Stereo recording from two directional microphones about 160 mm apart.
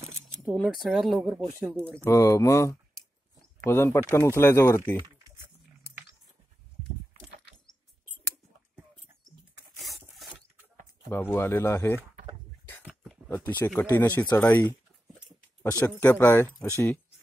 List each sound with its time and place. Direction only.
0.5 s speech: centre (ahead or behind)
2.0 s speech: 20° left (ahead or behind)
9.8 s rub: centre (ahead or behind)
11.1 s speech: 15° left (ahead or behind)
12.8 s a sound: centre (ahead or behind)
13.7 s speech: 10° left (ahead or behind)